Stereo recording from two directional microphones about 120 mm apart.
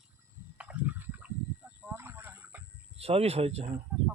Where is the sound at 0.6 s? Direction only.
10° right (ahead or behind).